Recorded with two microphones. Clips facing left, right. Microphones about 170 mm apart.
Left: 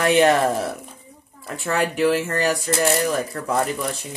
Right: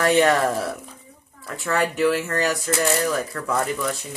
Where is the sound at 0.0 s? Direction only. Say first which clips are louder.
Left 1 dB; 25° left (ahead or behind).